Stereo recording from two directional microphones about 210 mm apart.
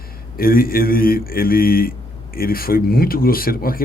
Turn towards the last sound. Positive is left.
turn(degrees=45)  # may be behind; listen again after turning